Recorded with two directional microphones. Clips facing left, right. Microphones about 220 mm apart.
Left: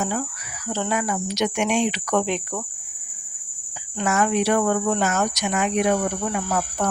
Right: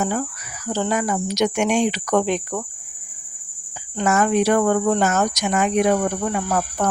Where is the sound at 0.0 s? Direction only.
45° right (ahead or behind).